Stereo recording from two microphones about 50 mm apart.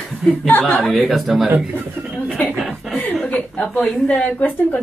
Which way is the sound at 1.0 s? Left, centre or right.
Centre.